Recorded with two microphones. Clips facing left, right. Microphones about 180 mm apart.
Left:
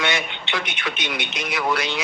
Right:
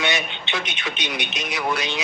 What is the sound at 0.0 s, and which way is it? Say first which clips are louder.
A man's voice: even; 20° right (ahead or behind).